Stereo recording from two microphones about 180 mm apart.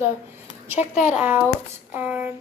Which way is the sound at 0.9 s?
5° right (ahead or behind).